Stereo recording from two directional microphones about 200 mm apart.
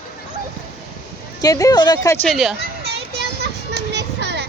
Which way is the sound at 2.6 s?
55° right (ahead or behind).